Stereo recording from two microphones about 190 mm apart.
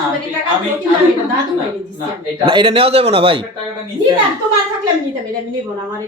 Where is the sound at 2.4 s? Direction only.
25° right (ahead or behind).